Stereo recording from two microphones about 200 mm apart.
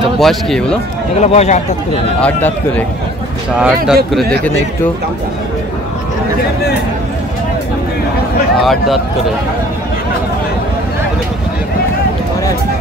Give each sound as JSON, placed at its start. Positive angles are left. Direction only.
{"t": 0.2, "sound": "speech", "side_deg": 0}
{"t": 1.2, "sound": "speech", "side_deg": 35}
{"t": 2.1, "sound": "a man's voice", "side_deg": 5}
{"t": 3.5, "sound": "speech", "side_deg": -5}
{"t": 8.6, "sound": "speech", "side_deg": 0}